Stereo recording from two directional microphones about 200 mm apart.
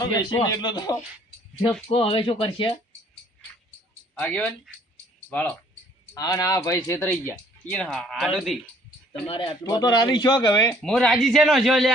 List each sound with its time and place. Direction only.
0.0 s speech: 20° left (ahead or behind)
4.1 s a man's voice: 5° left (ahead or behind)
9.2 s speech: 25° left (ahead or behind)
10.8 s a man's voice: centre (ahead or behind)